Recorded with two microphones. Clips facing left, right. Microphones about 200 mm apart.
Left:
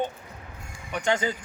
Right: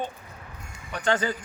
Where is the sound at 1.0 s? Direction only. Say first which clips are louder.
Even; 10° left (ahead or behind).